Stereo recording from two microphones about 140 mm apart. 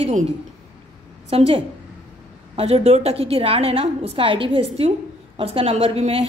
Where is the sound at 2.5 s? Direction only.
45° right (ahead or behind).